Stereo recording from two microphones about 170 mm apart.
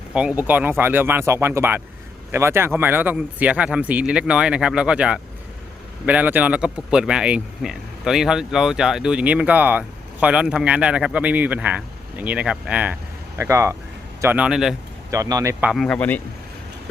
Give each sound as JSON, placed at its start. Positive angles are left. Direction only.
{"t": 0.1, "sound": "speech", "side_deg": -5}
{"t": 15.1, "sound": "speech", "side_deg": -20}
{"t": 15.6, "sound": "speech", "side_deg": 0}